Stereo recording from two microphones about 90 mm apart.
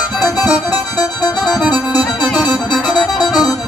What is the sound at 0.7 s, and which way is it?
Music, 15° right (ahead or behind).